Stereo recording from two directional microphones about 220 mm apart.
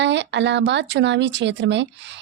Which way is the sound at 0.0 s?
55° right (ahead or behind).